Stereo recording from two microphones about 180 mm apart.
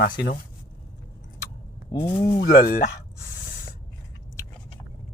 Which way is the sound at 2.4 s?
55° left (ahead or behind).